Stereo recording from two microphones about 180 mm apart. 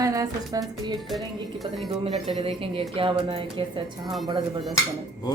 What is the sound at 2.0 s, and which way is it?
Speech, 30° right (ahead or behind).